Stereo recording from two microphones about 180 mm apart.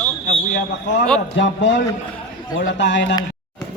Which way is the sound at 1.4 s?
90° left.